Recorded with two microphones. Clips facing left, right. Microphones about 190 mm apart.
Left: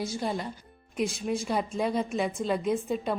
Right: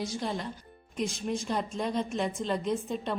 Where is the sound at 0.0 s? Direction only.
5° left (ahead or behind).